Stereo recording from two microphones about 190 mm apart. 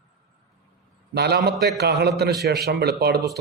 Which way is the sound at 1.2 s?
60° right (ahead or behind).